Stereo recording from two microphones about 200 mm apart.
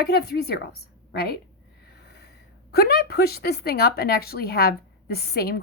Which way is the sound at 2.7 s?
50° left (ahead or behind).